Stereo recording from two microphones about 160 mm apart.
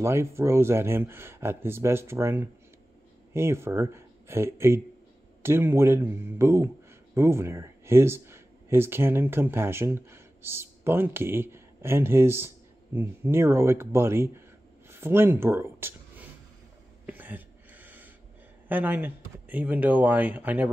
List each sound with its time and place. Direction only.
0.0 s speech: 15° right (ahead or behind)
17.0 s a sound: 10° right (ahead or behind)
18.7 s speech: 10° right (ahead or behind)